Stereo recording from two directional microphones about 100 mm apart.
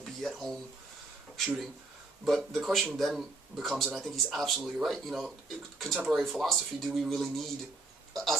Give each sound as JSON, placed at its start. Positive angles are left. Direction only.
{"t": 0.0, "sound": "speech", "side_deg": 0}
{"t": 2.2, "sound": "speech", "side_deg": 0}